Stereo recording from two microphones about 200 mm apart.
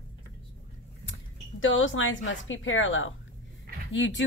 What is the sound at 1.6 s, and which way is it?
Speech, 75° left (ahead or behind).